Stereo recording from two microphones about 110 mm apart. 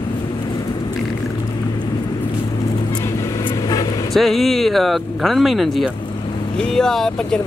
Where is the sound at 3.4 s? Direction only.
35° left (ahead or behind).